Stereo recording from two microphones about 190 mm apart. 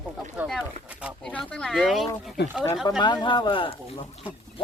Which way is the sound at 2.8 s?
20° left (ahead or behind).